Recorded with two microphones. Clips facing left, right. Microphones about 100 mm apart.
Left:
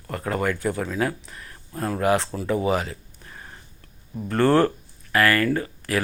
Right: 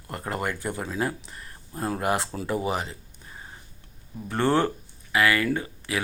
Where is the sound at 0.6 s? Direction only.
20° right (ahead or behind).